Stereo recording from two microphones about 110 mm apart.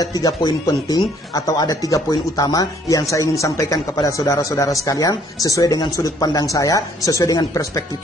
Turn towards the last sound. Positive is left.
turn(degrees=35)  # may be behind; listen again after turning